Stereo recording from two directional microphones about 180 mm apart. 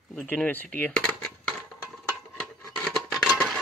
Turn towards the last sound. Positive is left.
turn(degrees=0)  # may be behind; listen again after turning